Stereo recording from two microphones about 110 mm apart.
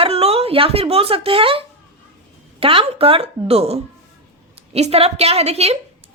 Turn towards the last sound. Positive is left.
turn(degrees=-70)  # may be behind; listen again after turning